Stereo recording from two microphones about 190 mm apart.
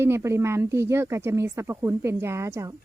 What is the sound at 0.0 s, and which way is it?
Speech, 15° right (ahead or behind).